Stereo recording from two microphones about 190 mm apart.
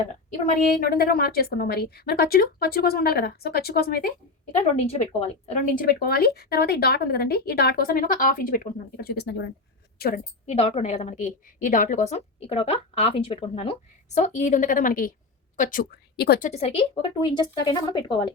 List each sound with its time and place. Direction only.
0.4 s a woman's voice: 50° left (ahead or behind)
4.6 s a woman's voice: 35° left (ahead or behind); by 10.1 s 55° left (ahead or behind)
10.4 s a woman's voice: 30° left (ahead or behind); by 16.5 s 55° left (ahead or behind)
16.5 s a woman's voice: 35° left (ahead or behind)